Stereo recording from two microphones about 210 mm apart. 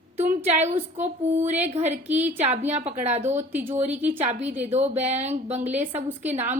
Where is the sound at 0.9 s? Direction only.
35° right (ahead or behind).